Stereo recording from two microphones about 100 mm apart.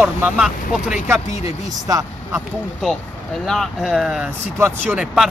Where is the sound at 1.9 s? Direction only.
35° right (ahead or behind).